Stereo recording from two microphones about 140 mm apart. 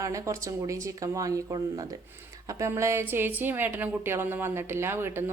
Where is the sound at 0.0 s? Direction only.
25° right (ahead or behind).